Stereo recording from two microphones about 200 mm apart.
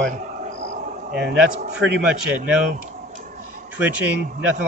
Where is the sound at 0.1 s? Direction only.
40° right (ahead or behind).